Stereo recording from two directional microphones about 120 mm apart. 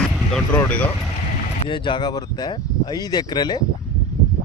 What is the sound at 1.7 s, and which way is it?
Speech, 40° left (ahead or behind).